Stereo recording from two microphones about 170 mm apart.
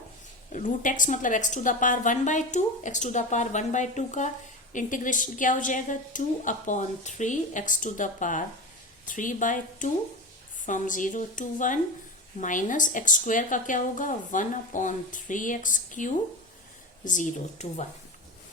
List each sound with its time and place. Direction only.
0.5 s a woman's voice: 50° left (ahead or behind)